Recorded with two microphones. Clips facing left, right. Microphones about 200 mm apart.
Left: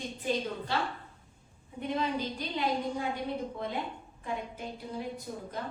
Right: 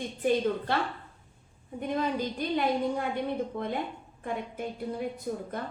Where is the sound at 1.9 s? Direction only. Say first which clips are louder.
Right 3 dB; 55° right (ahead or behind).